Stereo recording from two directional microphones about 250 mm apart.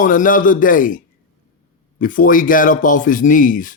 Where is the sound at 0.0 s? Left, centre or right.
Left.